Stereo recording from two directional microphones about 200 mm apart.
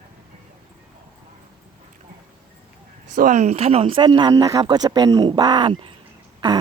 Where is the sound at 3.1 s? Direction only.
40° right (ahead or behind).